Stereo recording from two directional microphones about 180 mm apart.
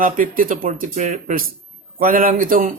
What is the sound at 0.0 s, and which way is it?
Speech, 50° right (ahead or behind).